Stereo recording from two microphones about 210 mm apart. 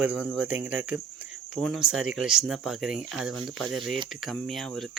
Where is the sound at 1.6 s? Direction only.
Centre (ahead or behind).